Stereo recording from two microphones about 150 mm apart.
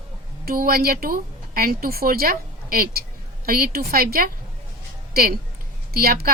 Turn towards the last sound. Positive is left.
turn(degrees=-90)